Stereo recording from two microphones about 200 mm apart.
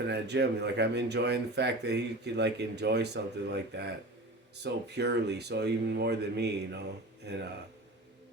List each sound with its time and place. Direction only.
0.1 s speech: 55° right (ahead or behind)